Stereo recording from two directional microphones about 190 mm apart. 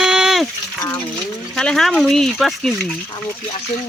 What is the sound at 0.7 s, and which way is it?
Speech, 15° left (ahead or behind).